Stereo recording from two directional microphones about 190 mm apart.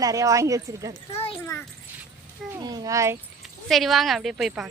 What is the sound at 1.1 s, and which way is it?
Speech, 30° left (ahead or behind).